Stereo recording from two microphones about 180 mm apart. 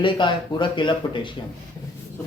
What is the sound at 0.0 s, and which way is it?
Speech, 25° left (ahead or behind).